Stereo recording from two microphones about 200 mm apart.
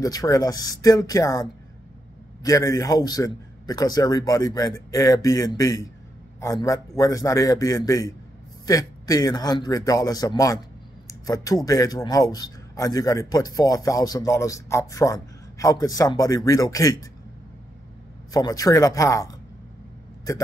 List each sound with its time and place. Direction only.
0.0 s a man's voice: 20° left (ahead or behind)
18.3 s a man's voice: 20° left (ahead or behind)